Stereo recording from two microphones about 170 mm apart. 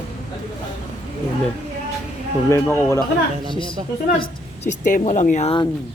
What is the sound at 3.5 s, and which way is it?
Speech, 30° left (ahead or behind).